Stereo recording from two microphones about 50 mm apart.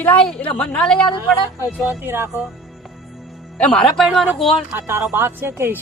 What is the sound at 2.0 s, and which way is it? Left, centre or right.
Speech, right.